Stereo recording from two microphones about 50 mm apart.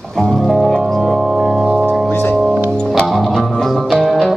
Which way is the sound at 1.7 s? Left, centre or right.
Centre.